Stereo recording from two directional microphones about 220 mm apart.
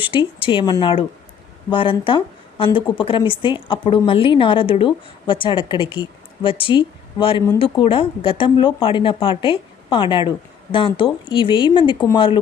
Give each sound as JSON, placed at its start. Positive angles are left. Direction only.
{"t": 0.4, "sound": "a woman's voice", "side_deg": 20}